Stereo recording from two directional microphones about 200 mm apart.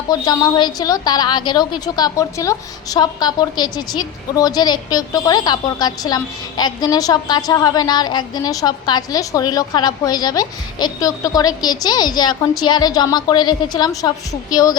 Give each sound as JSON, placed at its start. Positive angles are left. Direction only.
{"t": 0.1, "sound": "a woman's voice", "side_deg": 20}